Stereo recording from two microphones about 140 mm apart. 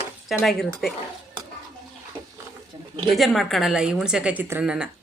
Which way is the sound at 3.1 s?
Centre (ahead or behind).